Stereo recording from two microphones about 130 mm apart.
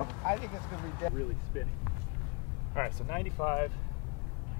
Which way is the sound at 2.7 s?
25° left (ahead or behind).